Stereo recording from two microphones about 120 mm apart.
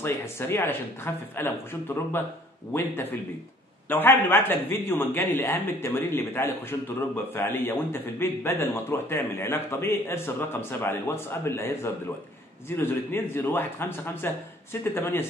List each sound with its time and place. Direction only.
0.0 s a man's voice: 20° left (ahead or behind)